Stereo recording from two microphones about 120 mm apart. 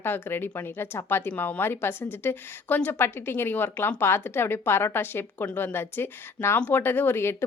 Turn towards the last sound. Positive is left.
turn(degrees=20)  # may be behind; listen again after turning